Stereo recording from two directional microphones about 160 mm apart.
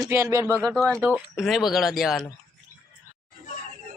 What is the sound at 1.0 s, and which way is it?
Speech, 10° right (ahead or behind).